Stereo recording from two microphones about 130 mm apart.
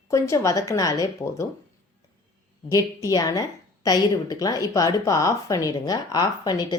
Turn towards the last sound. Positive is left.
turn(degrees=30)  # may be behind; listen again after turning